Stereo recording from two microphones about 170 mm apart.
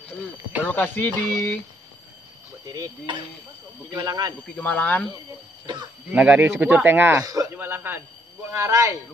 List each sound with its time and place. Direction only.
0.7 s speech: 10° left (ahead or behind)
2.6 s speech: 20° right (ahead or behind)
4.6 s speech: 10° left (ahead or behind)
6.1 s speech: 10° right (ahead or behind)